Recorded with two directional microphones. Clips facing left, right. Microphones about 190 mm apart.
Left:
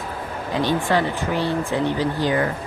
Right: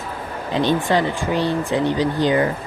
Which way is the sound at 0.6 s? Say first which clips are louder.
Right 2 dB; 20° right (ahead or behind).